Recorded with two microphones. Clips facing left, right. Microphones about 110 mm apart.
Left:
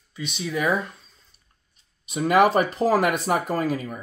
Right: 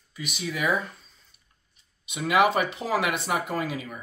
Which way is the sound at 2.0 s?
40° left (ahead or behind).